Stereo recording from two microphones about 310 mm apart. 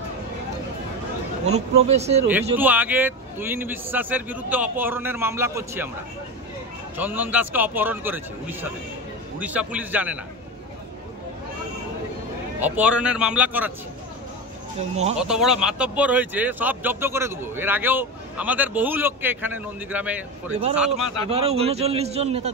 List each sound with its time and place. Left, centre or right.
1.4 s a man's voice: right
2.5 s a man's voice: centre
7.0 s speech: centre
12.5 s speech: centre
15.1 s speech: centre
20.9 s a man's voice: centre